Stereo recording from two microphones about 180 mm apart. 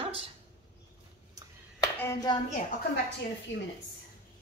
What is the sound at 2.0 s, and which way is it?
Speech, 20° left (ahead or behind).